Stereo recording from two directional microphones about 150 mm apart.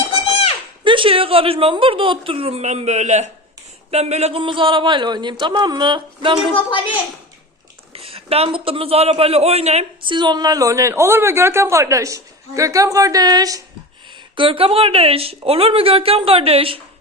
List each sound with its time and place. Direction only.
0.9 s a man's voice: 35° right (ahead or behind)
7.9 s a man's voice: 40° right (ahead or behind)
10.1 s a man's voice: 30° right (ahead or behind)
14.3 s a man's voice: 35° right (ahead or behind)